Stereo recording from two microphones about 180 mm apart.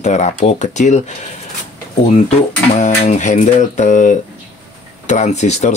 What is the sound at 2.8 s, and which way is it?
Speech, 40° left (ahead or behind).